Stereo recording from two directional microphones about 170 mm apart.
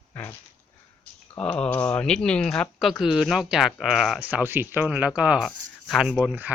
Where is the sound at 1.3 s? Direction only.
5° left (ahead or behind).